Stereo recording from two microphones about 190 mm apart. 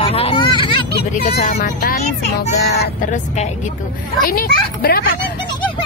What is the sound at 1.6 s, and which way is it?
Speech, 40° left (ahead or behind).